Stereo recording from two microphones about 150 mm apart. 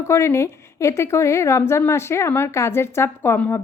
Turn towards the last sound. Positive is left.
turn(degrees=15)  # may be behind; listen again after turning